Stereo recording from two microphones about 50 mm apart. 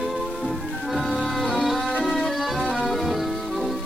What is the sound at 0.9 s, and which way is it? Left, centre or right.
Music, centre.